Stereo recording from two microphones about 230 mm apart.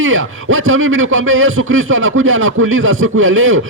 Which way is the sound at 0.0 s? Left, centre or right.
Right.